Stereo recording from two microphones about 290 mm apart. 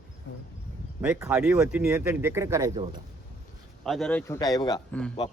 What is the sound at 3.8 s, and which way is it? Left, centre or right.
Speech, centre.